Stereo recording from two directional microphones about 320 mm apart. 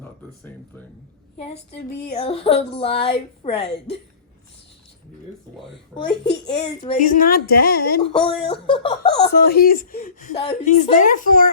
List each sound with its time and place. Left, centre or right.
1.4 s speech: centre
6.1 s a child's voice: centre
6.8 s speech: left
8.4 s speech: centre
9.3 s speech: left